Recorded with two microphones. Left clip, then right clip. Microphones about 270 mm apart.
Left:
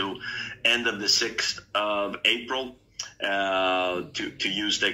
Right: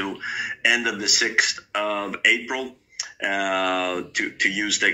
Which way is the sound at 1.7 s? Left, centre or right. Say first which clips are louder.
Right 1 dB; right.